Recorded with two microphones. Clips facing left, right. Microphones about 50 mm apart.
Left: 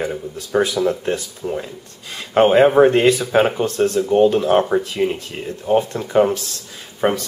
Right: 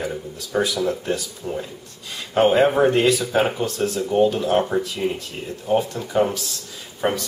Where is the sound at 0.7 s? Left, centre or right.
Centre.